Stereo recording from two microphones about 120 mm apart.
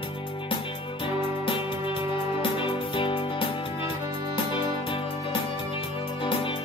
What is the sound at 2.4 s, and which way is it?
Music, 45° left (ahead or behind).